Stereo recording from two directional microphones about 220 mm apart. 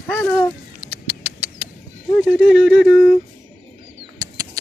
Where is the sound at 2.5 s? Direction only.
Centre (ahead or behind).